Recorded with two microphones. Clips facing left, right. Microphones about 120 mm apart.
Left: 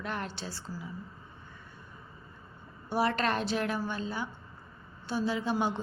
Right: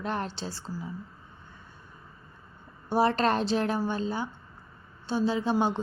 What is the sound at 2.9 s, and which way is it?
A woman's voice, 30° right (ahead or behind).